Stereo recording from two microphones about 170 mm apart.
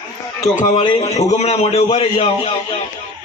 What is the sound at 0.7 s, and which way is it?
A man's voice, 30° left (ahead or behind).